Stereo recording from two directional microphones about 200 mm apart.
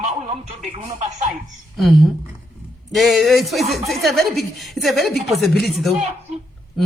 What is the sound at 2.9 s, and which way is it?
A woman's voice, centre (ahead or behind).